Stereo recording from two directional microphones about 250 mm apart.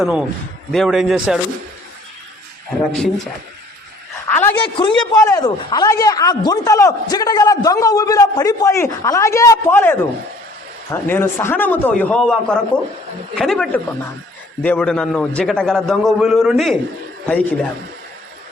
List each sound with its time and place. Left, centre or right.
0.0 s a man's voice: centre
4.3 s a sound: centre
4.6 s speech: centre
11.1 s a man's voice: centre